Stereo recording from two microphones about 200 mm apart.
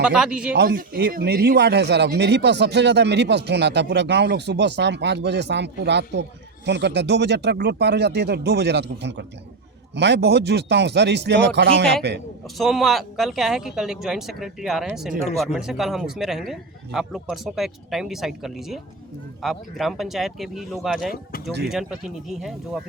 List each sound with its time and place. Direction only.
0.0 s a man's voice: 5° right (ahead or behind)
0.5 s speech: 55° right (ahead or behind)
12.5 s a man's voice: centre (ahead or behind)